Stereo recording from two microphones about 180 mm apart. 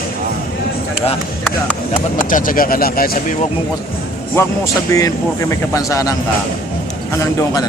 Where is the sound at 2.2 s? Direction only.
50° left (ahead or behind).